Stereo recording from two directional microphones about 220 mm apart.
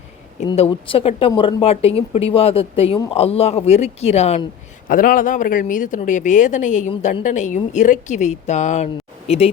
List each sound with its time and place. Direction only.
0.4 s speech: 25° left (ahead or behind)